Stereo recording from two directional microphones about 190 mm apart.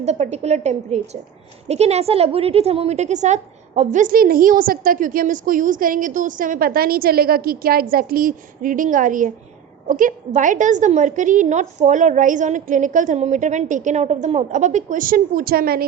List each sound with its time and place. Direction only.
0.0 s a woman's voice: 35° right (ahead or behind); by 15.8 s 50° right (ahead or behind)